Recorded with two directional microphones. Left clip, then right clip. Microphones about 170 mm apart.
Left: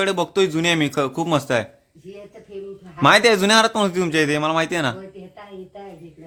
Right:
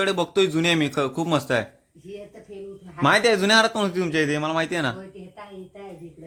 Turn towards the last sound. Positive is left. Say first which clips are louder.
# left 4 dB
turn(degrees=15)  # may be behind; listen again after turning